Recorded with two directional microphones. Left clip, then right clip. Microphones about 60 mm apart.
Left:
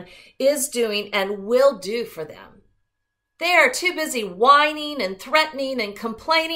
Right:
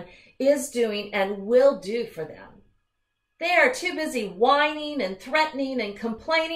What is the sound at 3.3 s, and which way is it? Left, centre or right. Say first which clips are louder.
A woman's voice: left 3 dB; left.